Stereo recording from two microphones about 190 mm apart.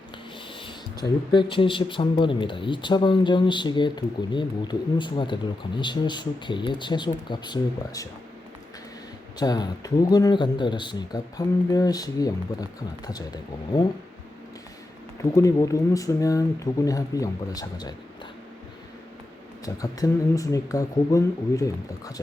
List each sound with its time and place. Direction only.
1.3 s speech: 25° left (ahead or behind)
9.4 s speech: 20° left (ahead or behind)
15.2 s speech: 15° left (ahead or behind)
19.6 s speech: 20° left (ahead or behind)